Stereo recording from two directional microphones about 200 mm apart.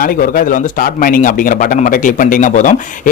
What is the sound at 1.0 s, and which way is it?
Speech, 45° left (ahead or behind).